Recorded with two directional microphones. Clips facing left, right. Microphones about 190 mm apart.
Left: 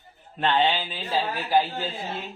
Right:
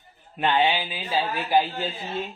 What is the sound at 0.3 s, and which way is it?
Speech, 10° right (ahead or behind).